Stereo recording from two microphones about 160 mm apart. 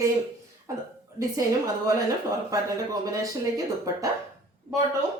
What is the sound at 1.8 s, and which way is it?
A woman's voice, 20° right (ahead or behind).